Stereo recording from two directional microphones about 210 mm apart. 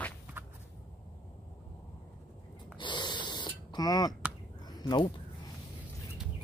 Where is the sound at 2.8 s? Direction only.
20° left (ahead or behind).